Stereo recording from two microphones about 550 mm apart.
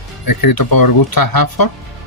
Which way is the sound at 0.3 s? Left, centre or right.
Left.